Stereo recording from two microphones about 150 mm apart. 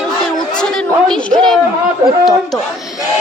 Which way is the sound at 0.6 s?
5° left (ahead or behind).